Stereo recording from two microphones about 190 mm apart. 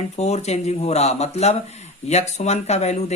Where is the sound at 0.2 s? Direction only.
35° left (ahead or behind).